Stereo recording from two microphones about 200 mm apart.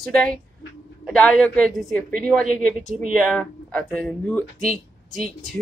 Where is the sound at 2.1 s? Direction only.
45° right (ahead or behind).